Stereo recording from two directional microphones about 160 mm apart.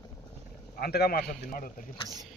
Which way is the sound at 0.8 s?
75° left (ahead or behind).